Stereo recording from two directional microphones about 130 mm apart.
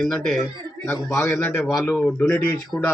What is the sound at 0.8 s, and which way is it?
Speech, 20° left (ahead or behind).